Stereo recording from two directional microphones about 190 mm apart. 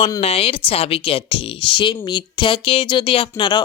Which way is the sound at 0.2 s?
30° left (ahead or behind).